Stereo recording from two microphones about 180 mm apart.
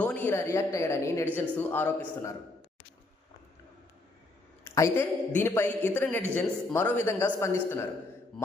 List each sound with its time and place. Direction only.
0.0 s a man's voice: 10° left (ahead or behind)
4.6 s a man's voice: 15° left (ahead or behind)